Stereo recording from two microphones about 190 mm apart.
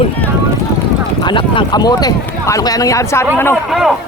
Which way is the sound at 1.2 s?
25° left (ahead or behind).